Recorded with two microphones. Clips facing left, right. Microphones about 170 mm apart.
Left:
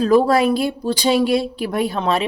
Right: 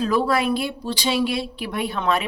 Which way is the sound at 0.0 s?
40° left (ahead or behind).